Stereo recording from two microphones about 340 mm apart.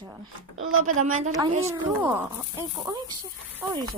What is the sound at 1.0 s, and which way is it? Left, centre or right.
Speech, right.